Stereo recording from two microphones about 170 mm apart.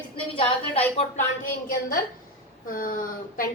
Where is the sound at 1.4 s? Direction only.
55° left (ahead or behind).